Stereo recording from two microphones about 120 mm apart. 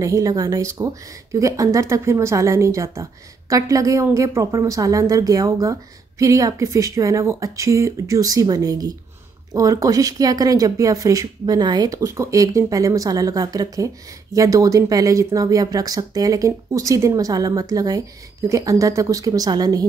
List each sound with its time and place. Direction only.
0.0 s speech: 30° right (ahead or behind)